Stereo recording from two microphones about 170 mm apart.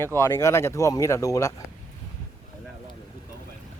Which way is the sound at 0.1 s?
15° left (ahead or behind).